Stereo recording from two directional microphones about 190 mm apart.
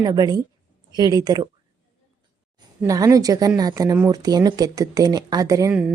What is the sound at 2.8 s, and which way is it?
Speech, 15° right (ahead or behind).